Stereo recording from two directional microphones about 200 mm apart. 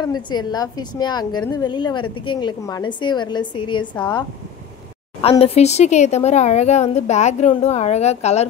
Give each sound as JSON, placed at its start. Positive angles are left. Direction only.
{"t": 0.0, "sound": "a woman's voice", "side_deg": 20}
{"t": 5.4, "sound": "a woman's voice", "side_deg": 30}